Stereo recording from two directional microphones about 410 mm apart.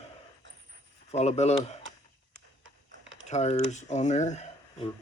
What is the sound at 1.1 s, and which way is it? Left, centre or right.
Speech, centre.